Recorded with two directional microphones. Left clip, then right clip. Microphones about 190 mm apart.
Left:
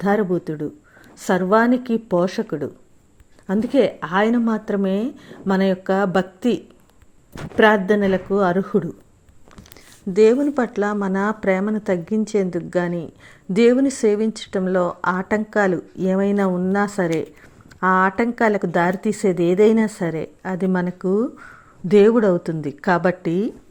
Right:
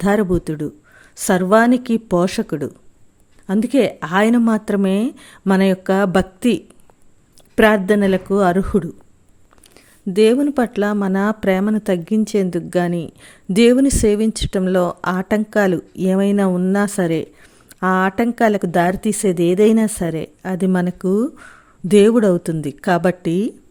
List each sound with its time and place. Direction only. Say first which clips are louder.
0.0 s speech: right 2 dB; 45° right (ahead or behind)
3.4 s speech: right 1 dB; 35° right (ahead or behind)
10.1 s speech: right 1 dB; 50° right (ahead or behind)